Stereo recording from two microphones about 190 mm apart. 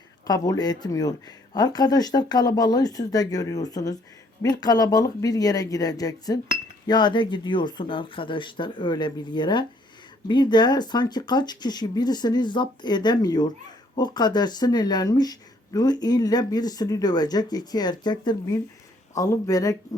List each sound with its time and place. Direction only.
0.3 s speech: 20° left (ahead or behind)